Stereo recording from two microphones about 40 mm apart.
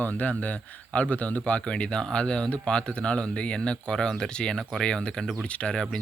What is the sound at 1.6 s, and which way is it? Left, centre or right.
Speech, left.